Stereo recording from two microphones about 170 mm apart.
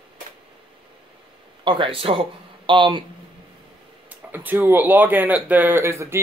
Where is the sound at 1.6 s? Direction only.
30° right (ahead or behind).